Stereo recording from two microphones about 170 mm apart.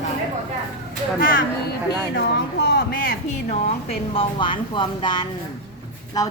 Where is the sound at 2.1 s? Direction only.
70° left (ahead or behind).